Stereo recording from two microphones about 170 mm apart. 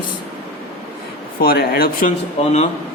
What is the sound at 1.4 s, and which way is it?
Speech, 65° left (ahead or behind).